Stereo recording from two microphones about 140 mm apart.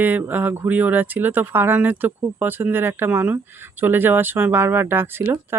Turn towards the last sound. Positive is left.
turn(degrees=-15)  # may be behind; listen again after turning